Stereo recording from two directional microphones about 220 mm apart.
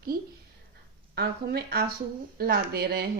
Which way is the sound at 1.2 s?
45° right (ahead or behind).